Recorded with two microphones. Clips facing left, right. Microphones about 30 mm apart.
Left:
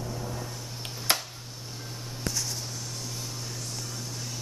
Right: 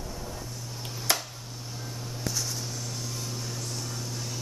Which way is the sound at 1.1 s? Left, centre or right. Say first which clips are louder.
Left 1 dB; left.